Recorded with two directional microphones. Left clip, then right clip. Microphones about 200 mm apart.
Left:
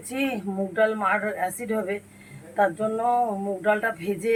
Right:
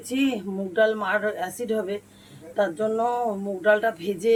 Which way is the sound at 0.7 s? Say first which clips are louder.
Right 1 dB; 5° right (ahead or behind).